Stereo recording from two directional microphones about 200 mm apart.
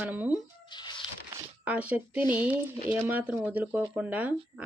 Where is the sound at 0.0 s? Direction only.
10° right (ahead or behind).